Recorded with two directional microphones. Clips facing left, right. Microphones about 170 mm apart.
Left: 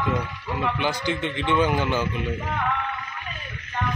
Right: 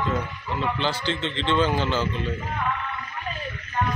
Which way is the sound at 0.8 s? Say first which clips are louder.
Left 1 dB; 15° left (ahead or behind).